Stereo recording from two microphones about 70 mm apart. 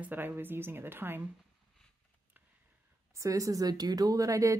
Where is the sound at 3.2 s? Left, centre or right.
Right.